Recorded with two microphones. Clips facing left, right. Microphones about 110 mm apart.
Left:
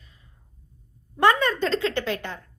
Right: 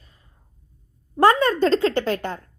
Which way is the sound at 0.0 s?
40° right (ahead or behind).